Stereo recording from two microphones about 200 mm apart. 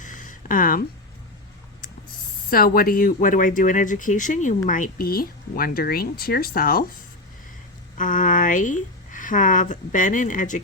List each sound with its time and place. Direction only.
0.0 s a sound: 40° left (ahead or behind)
2.5 s speech: 50° left (ahead or behind)
7.9 s speech: 40° left (ahead or behind)